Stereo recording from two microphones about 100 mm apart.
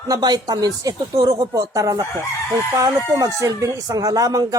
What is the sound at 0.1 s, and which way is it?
Speech, 40° right (ahead or behind).